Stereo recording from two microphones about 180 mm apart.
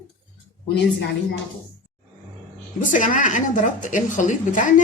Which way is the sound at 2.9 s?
45° left (ahead or behind).